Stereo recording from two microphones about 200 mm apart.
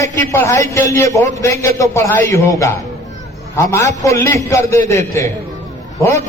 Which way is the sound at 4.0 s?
15° left (ahead or behind).